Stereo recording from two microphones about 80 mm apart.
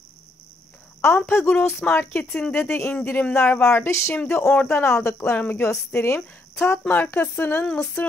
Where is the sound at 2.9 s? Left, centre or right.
Left.